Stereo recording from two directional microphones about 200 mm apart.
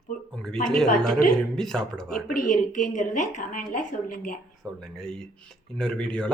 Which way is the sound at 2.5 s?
40° left (ahead or behind).